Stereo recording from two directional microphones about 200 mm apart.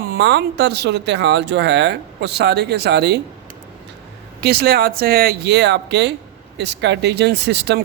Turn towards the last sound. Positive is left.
turn(degrees=-55)  # may be behind; listen again after turning